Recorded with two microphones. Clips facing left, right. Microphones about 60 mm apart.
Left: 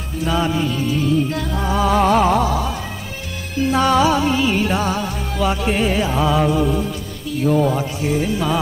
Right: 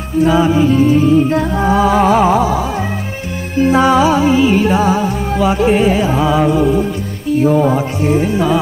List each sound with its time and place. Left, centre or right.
0.3 s music: centre
0.7 s music: right
1.6 s music: centre
3.7 s music: centre
6.8 s music: right